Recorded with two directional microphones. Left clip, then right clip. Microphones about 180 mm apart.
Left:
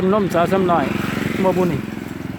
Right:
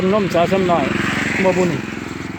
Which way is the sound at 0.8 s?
20° left (ahead or behind).